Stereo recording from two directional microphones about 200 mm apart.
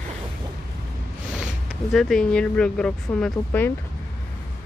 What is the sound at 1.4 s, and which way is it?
Speech, centre (ahead or behind).